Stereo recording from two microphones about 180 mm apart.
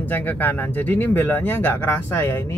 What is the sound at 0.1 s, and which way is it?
Speech, 10° left (ahead or behind).